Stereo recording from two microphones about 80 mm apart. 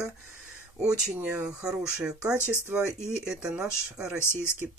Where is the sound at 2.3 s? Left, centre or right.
Left.